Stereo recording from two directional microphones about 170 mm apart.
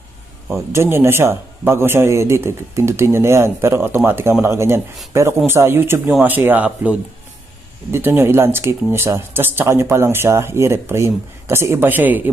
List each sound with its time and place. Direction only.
0.4 s speech: 15° right (ahead or behind)
7.9 s speech: 15° right (ahead or behind)